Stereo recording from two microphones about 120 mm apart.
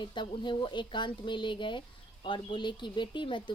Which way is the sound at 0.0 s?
40° left (ahead or behind).